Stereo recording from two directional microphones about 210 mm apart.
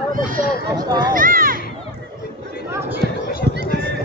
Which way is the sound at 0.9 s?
20° right (ahead or behind).